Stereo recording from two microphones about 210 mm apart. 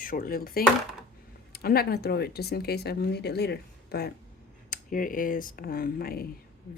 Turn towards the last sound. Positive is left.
turn(degrees=45)  # may be behind; listen again after turning